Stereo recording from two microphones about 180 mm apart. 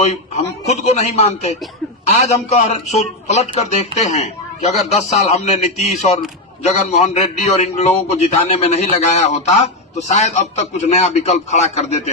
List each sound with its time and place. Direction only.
0.0 s a man's voice: 40° left (ahead or behind)